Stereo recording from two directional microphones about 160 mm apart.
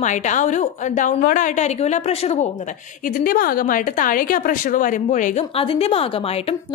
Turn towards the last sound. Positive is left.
turn(degrees=40)  # may be behind; listen again after turning